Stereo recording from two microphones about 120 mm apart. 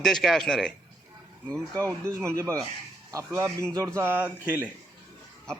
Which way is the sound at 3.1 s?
25° right (ahead or behind).